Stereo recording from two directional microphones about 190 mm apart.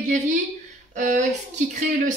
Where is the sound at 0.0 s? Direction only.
40° right (ahead or behind).